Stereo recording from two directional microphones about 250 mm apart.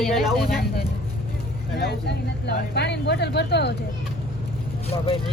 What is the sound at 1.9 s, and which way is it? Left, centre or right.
Speech, left.